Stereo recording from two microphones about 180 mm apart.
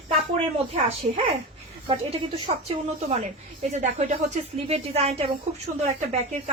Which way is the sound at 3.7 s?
40° right (ahead or behind).